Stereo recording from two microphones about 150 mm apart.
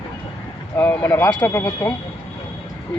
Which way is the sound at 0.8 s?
10° left (ahead or behind).